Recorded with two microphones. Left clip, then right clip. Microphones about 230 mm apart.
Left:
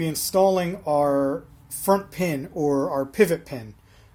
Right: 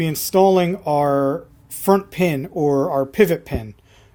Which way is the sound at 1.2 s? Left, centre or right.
Right.